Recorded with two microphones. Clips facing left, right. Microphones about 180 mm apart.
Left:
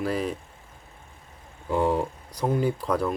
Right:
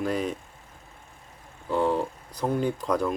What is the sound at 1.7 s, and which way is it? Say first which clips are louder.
Speech: left 1 dB; 10° left (ahead or behind).